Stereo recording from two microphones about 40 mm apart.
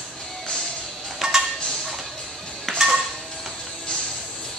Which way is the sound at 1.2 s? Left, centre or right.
Centre.